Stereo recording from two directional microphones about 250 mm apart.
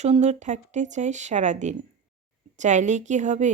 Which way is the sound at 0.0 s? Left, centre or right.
Right.